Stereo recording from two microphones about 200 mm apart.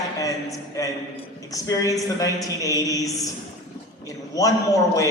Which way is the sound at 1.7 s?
15° left (ahead or behind).